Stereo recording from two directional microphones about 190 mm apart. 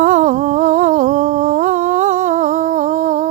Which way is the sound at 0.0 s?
40° right (ahead or behind).